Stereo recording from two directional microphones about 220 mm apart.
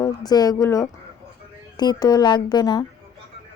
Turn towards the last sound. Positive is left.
turn(degrees=20)  # may be behind; listen again after turning